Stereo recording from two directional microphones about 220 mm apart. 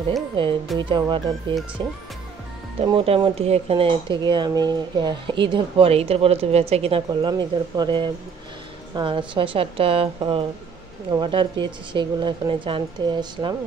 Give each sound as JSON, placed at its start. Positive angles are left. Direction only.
{"t": 0.4, "sound": "speech", "side_deg": -25}
{"t": 2.9, "sound": "speech", "side_deg": -20}